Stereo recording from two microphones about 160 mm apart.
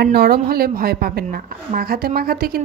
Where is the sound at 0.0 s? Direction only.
80° right.